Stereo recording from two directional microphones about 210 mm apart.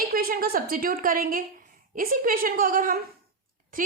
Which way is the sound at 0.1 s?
45° right (ahead or behind).